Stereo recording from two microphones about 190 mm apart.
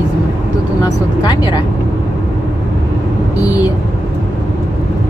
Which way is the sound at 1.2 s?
20° left (ahead or behind).